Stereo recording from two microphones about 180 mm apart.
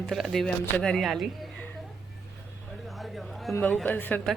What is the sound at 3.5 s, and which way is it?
Speech, 5° left (ahead or behind).